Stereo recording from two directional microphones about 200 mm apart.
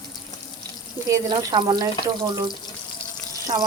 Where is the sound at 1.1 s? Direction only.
20° right (ahead or behind).